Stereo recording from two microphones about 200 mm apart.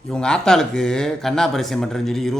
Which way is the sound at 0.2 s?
5° left (ahead or behind).